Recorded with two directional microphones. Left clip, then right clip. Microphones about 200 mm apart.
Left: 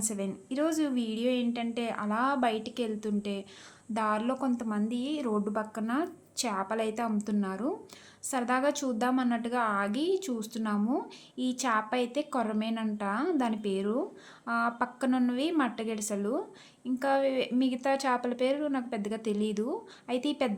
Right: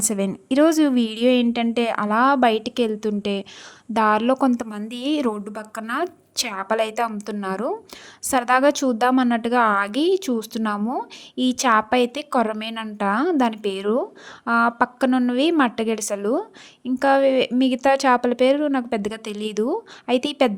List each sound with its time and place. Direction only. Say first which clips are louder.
0.0 s a woman's voice: right 11 dB; 50° right (ahead or behind)